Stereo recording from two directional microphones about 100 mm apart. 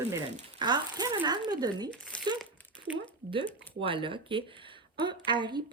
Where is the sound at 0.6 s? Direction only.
45° right (ahead or behind).